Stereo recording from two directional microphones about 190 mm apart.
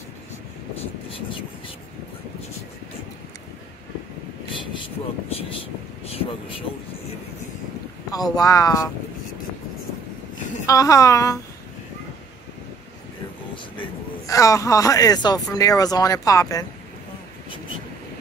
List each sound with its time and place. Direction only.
4.5 s vehicle: 25° left (ahead or behind)
6.0 s speech: 30° left (ahead or behind)
8.1 s speech: 20° left (ahead or behind)
10.7 s speech: 15° left (ahead or behind)
14.2 s speech: 15° left (ahead or behind)